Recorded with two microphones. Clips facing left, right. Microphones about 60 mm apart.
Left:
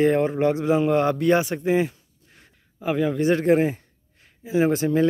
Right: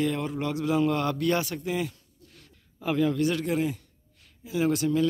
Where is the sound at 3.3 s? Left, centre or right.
Left.